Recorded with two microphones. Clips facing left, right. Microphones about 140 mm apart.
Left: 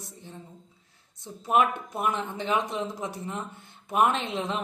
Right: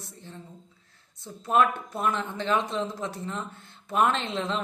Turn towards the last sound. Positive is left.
turn(degrees=15)  # may be behind; listen again after turning